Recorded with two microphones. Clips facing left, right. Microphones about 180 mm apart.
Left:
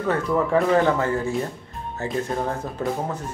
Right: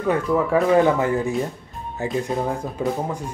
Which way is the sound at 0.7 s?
15° right (ahead or behind).